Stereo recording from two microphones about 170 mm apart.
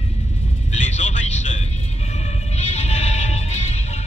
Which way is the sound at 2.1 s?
40° left (ahead or behind).